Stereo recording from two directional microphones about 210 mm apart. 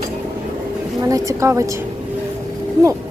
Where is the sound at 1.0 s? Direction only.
15° right (ahead or behind).